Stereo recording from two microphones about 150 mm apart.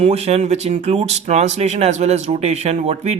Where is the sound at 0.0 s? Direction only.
45° right (ahead or behind).